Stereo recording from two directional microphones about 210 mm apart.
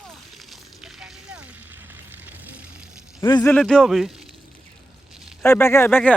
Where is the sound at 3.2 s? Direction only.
20° left (ahead or behind).